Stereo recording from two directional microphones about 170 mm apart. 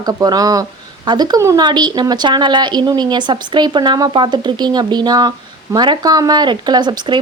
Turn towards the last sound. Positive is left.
turn(degrees=-25)  # may be behind; listen again after turning